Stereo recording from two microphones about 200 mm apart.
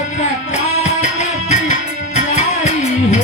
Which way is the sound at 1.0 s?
35° left (ahead or behind).